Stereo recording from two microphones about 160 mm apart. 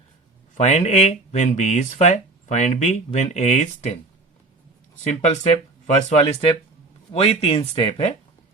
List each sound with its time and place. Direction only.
0.5 s speech: 45° left (ahead or behind)
5.0 s speech: 45° left (ahead or behind)